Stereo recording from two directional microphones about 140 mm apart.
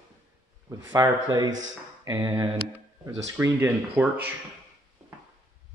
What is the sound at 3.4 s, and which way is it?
Speech, 15° right (ahead or behind).